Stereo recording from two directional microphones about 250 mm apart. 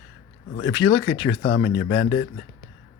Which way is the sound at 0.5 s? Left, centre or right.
Left.